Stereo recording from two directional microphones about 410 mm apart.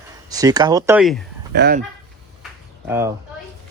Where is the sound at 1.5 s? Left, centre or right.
Right.